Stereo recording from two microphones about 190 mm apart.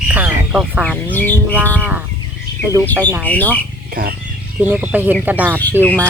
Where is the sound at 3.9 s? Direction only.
50° right (ahead or behind).